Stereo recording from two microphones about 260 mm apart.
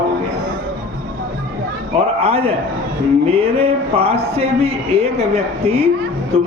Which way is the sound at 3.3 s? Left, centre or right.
Right.